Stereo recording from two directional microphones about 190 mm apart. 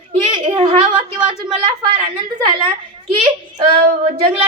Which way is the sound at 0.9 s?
5° right (ahead or behind).